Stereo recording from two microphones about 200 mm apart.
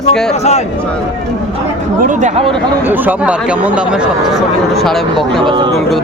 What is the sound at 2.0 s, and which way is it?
Speech, 35° right (ahead or behind).